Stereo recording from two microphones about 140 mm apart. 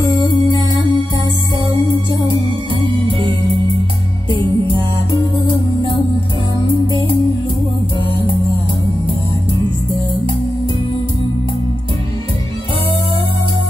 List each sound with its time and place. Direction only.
0.0 s music: 30° left (ahead or behind)
5.5 s music: 35° right (ahead or behind)